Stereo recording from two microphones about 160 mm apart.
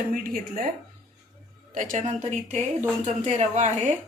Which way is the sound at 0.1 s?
60° right (ahead or behind).